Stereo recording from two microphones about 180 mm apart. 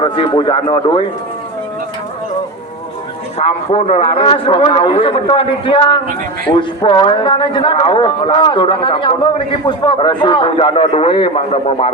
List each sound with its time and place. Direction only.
0.0 s a man's voice: 30° left (ahead or behind)
3.3 s a man's voice: 35° left (ahead or behind)